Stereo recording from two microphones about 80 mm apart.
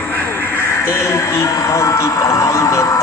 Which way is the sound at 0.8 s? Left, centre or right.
Left.